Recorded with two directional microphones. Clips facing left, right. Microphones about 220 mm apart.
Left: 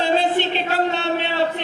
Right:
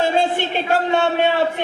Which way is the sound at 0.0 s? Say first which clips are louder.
Even; 50° right (ahead or behind).